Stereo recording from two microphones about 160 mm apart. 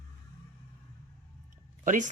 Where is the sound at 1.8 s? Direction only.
55° right (ahead or behind).